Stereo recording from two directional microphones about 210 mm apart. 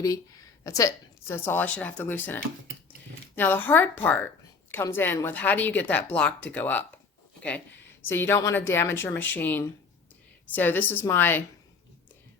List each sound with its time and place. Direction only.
0.6 s a woman's voice: 15° left (ahead or behind)
8.0 s a woman's voice: 10° left (ahead or behind)